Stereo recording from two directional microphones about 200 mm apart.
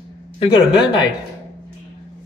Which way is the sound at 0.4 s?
20° left (ahead or behind).